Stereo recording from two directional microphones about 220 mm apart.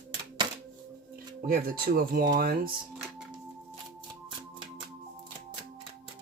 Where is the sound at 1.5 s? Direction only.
40° right (ahead or behind).